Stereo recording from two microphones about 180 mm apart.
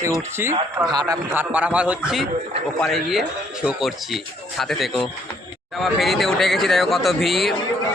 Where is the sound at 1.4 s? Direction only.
10° right (ahead or behind).